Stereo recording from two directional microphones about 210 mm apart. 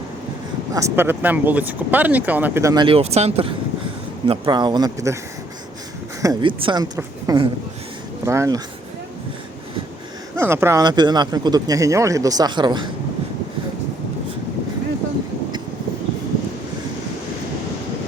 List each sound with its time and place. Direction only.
0.7 s a woman's voice: 15° right (ahead or behind)
6.2 s a woman's voice: 25° right (ahead or behind)
10.3 s speech: 10° right (ahead or behind)